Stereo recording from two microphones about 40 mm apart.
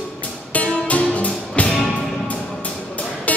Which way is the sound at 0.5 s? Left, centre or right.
Left.